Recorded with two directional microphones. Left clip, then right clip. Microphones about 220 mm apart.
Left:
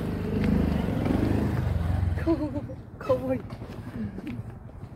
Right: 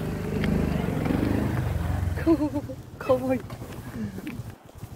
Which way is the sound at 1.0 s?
50° right (ahead or behind).